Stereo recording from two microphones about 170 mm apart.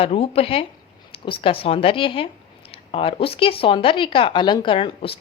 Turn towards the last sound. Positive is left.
turn(degrees=30)  # may be behind; listen again after turning